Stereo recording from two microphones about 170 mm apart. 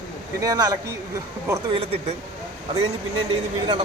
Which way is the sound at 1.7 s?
35° right (ahead or behind).